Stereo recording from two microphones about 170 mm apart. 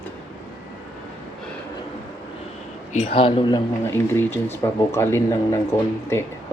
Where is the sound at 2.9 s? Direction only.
35° left (ahead or behind).